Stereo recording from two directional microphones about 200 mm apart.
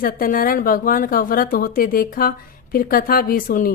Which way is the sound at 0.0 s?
45° left (ahead or behind).